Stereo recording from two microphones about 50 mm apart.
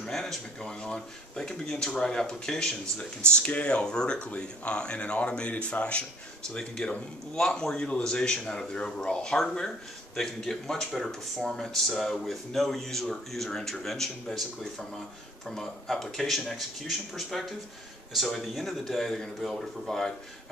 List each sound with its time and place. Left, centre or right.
0.0 s a man's voice: centre
3.3 s a man's voice: left; by 20.1 s centre